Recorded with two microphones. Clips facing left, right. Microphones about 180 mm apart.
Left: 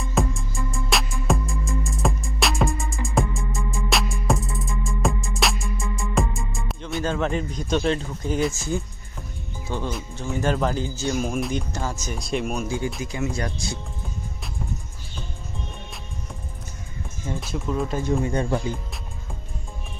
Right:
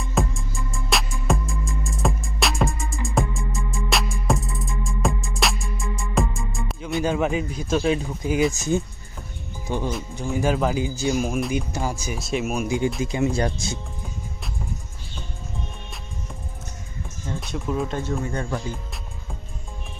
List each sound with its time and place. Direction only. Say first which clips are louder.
0.0 s music: left 1 dB; centre (ahead or behind)
7.0 s a man's voice: right 2 dB; 10° right (ahead or behind)
8.5 s a man's voice: right 4 dB; 20° right (ahead or behind); by 11.6 s centre (ahead or behind)
11.7 s a man's voice: right 2 dB; 15° right (ahead or behind)
13.0 s speech: right 5 dB; 25° right (ahead or behind)
17.4 s speech: right 1 dB; centre (ahead or behind)
18.0 s speech: left 4 dB; 20° left (ahead or behind)